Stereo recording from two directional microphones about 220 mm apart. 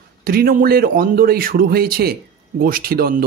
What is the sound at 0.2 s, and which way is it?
A man's voice, 45° right (ahead or behind).